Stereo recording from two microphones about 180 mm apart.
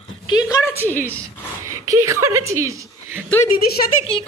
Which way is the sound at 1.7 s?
20° right (ahead or behind).